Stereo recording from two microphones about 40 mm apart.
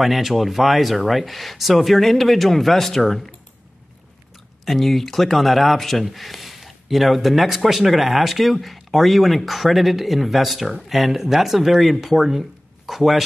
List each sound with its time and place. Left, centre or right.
0.0 s speech: centre
4.6 s speech: centre